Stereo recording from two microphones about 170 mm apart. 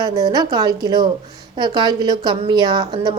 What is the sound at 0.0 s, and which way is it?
A woman's voice, 20° right (ahead or behind).